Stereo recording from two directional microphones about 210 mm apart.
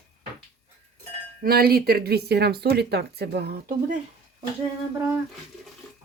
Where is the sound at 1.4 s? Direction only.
45° right (ahead or behind).